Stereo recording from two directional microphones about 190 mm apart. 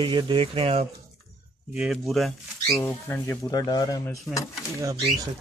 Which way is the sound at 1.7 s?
Centre (ahead or behind).